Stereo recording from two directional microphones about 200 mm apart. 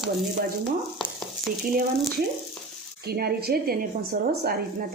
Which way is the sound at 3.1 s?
50° right (ahead or behind).